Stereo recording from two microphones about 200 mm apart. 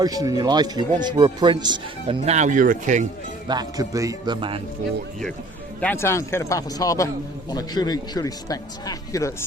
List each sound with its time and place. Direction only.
0.0 s speech: 20° right (ahead or behind); by 3.1 s 40° right (ahead or behind)
3.4 s speech: 20° right (ahead or behind)
5.8 s speech: 10° left (ahead or behind)